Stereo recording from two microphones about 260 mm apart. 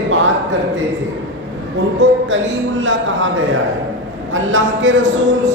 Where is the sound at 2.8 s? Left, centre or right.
Right.